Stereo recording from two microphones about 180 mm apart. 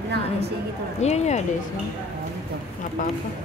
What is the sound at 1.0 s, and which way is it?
Speech, 40° left (ahead or behind).